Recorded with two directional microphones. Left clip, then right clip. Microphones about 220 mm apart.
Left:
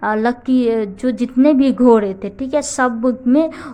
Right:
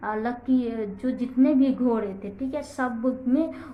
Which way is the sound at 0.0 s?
50° left (ahead or behind).